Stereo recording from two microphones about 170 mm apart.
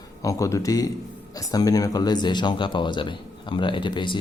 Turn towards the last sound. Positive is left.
turn(degrees=25)  # may be behind; listen again after turning